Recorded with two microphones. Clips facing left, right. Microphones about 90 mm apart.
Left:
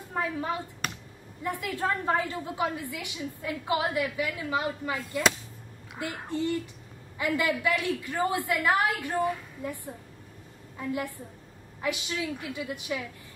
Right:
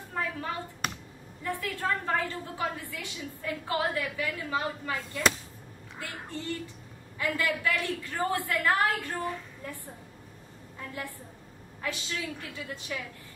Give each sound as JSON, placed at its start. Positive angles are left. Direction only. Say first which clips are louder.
{"t": 0.1, "sound": "a woman's voice", "louder": "left 3 dB", "side_deg": 20}
{"t": 10.8, "sound": "a woman's voice", "louder": "left 7 dB", "side_deg": 15}